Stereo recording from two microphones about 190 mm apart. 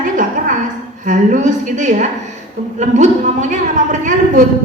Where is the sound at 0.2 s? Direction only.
45° right (ahead or behind).